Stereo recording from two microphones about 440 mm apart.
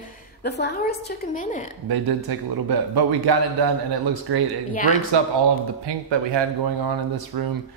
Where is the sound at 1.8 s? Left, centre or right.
Right.